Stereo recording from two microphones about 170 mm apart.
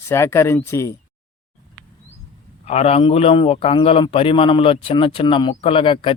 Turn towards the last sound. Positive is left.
turn(degrees=30)  # may be behind; listen again after turning